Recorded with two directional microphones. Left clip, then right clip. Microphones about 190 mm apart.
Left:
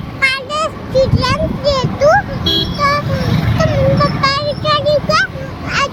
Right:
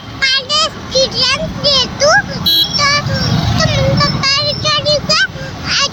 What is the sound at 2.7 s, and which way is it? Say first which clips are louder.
Child singing: right 1 dB; 20° left (ahead or behind).